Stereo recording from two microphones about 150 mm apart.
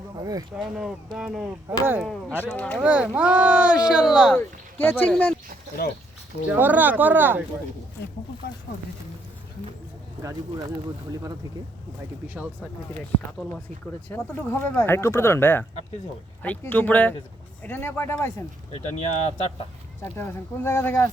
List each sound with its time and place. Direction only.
0.2 s speech: 25° right (ahead or behind)
0.5 s speech: 5° right (ahead or behind)
1.8 s speech: 15° right (ahead or behind)
2.4 s speech: 10° left (ahead or behind)
2.8 s speech: 10° right (ahead or behind)
4.4 s speech: 10° left (ahead or behind)
6.5 s speech: 10° right (ahead or behind)
14.1 s speech: 15° left (ahead or behind)
20.1 s speech: 15° left (ahead or behind)